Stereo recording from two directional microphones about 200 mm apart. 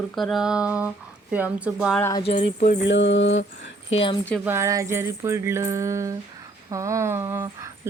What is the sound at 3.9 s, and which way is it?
Speech, 25° left (ahead or behind).